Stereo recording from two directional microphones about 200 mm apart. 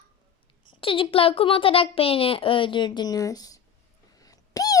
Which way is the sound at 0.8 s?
25° left (ahead or behind).